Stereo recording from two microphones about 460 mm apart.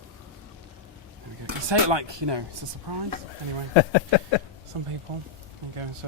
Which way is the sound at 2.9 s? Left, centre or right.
Right.